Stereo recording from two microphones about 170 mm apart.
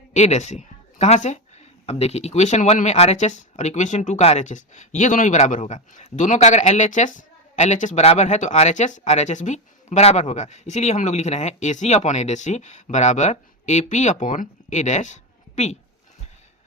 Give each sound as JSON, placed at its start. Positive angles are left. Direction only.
{"t": 0.1, "sound": "speech", "side_deg": 40}